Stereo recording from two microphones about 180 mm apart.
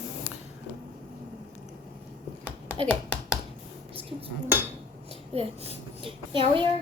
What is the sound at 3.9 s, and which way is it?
Dishes, 30° right (ahead or behind).